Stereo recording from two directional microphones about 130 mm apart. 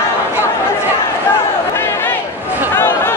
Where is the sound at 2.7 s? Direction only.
20° left (ahead or behind).